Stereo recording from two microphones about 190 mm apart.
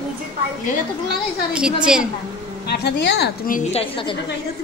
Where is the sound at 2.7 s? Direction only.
60° left (ahead or behind).